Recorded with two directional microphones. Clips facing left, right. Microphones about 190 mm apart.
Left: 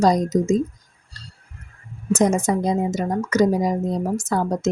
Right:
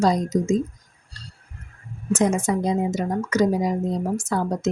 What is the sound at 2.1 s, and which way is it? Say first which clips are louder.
A woman's voice: left 2 dB; 40° left (ahead or behind).